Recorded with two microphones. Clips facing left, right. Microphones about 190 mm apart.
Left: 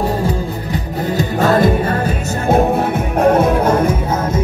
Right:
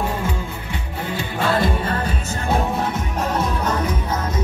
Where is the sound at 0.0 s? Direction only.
35° left (ahead or behind).